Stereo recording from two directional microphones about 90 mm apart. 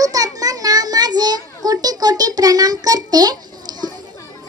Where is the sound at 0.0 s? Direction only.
45° right (ahead or behind).